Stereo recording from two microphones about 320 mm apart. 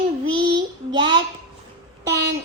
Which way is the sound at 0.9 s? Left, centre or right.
Centre.